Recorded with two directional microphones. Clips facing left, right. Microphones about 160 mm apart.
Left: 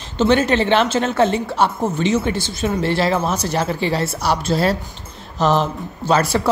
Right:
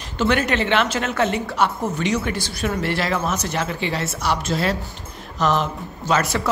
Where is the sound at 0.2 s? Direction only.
25° left (ahead or behind).